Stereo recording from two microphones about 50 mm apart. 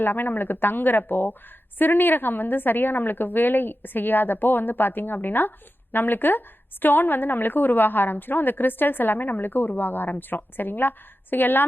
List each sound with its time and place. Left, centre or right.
0.0 s a woman's voice: left